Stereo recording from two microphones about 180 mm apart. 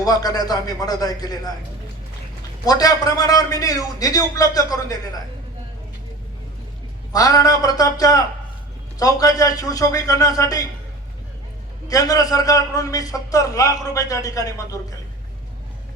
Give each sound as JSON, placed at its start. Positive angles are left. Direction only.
{"t": 0.0, "sound": "a man's voice", "side_deg": 20}
{"t": 2.6, "sound": "a man's voice", "side_deg": 20}
{"t": 7.1, "sound": "a man's voice", "side_deg": 20}
{"t": 11.9, "sound": "a man's voice", "side_deg": 20}